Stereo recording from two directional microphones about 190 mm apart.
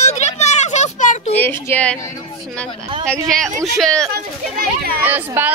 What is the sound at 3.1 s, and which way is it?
Speech, centre (ahead or behind).